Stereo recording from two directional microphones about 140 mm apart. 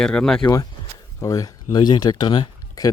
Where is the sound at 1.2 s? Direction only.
25° left (ahead or behind).